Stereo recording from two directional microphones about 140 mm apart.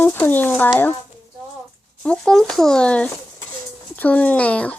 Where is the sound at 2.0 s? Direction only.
5° left (ahead or behind).